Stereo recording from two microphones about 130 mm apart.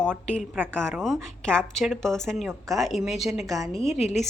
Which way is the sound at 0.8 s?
Centre (ahead or behind).